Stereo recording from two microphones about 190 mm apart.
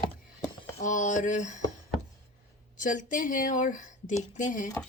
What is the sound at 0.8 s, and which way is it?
Speech, 40° left (ahead or behind).